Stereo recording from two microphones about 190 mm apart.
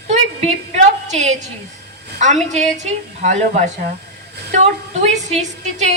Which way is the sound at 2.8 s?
40° right (ahead or behind).